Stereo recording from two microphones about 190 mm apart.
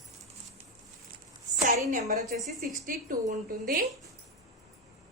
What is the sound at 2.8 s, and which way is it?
Speech, 45° right (ahead or behind).